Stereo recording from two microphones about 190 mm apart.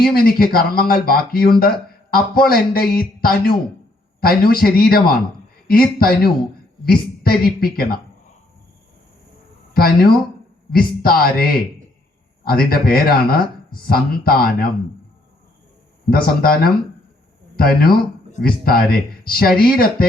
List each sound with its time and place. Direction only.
0.0 s a man's voice: 55° left (ahead or behind)
9.7 s a man's voice: 50° left (ahead or behind)
12.5 s a man's voice: 50° left (ahead or behind)
16.0 s a man's voice: 50° left (ahead or behind)
17.6 s a man's voice: 50° left (ahead or behind)